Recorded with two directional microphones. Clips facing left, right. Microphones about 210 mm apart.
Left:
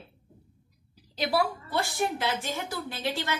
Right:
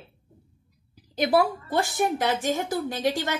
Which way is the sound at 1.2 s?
50° right (ahead or behind).